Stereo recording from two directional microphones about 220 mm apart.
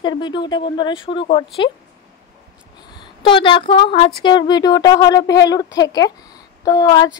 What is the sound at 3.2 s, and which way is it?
A woman's voice, 25° left (ahead or behind).